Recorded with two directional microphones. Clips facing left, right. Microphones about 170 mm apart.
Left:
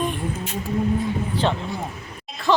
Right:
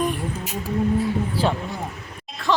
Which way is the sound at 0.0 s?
5° right (ahead or behind).